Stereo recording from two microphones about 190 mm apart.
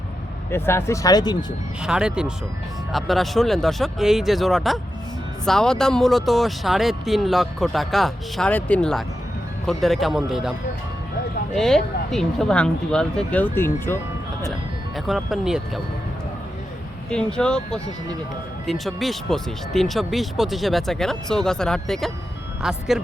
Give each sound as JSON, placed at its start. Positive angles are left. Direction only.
{"t": 0.5, "sound": "speech", "side_deg": 10}
{"t": 1.8, "sound": "speech", "side_deg": -5}
{"t": 11.5, "sound": "speech", "side_deg": 0}
{"t": 14.9, "sound": "speech", "side_deg": 0}
{"t": 17.1, "sound": "speech", "side_deg": 5}